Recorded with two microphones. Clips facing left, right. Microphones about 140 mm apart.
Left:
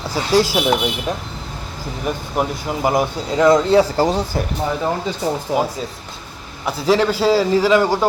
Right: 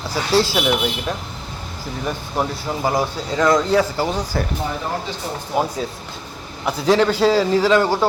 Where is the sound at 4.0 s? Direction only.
35° left (ahead or behind).